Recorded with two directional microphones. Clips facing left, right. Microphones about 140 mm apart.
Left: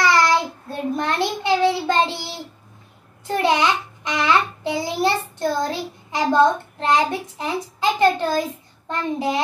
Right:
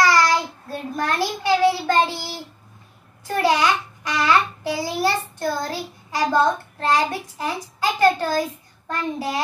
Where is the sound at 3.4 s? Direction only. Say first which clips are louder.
Even; 20° left (ahead or behind).